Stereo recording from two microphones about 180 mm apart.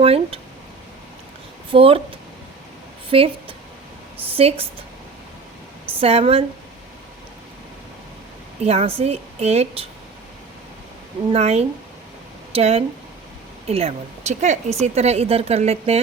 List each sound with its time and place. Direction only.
0.0 s speech: 30° right (ahead or behind)
1.7 s speech: 30° right (ahead or behind)
3.1 s speech: 30° right (ahead or behind)
4.4 s speech: 35° right (ahead or behind)
6.0 s speech: 35° right (ahead or behind)
8.6 s speech: 35° right (ahead or behind)
11.3 s speech: 35° right (ahead or behind)